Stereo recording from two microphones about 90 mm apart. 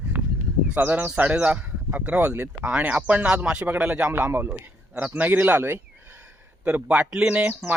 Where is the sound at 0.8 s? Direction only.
20° right (ahead or behind).